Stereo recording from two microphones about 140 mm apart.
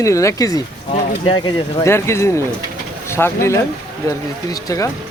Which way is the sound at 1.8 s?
20° left (ahead or behind).